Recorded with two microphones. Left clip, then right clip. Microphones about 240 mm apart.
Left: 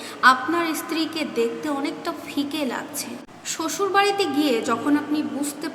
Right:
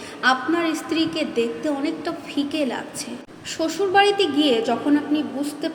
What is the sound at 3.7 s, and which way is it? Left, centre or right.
Speech, centre.